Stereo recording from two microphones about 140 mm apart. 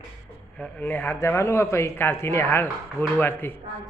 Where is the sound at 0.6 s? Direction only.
10° left (ahead or behind).